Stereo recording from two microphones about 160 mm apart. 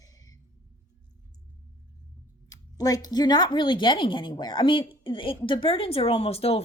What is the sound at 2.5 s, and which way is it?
Speech, 25° left (ahead or behind).